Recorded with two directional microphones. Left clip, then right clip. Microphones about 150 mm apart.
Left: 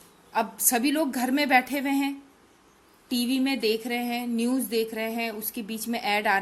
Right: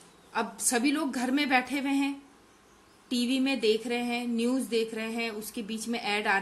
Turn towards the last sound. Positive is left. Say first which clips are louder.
# left 4 dB
turn(degrees=45)  # may be behind; listen again after turning